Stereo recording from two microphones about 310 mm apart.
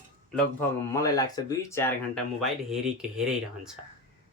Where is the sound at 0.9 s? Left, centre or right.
Centre.